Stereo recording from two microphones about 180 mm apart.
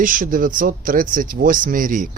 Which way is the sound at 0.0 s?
50° right (ahead or behind).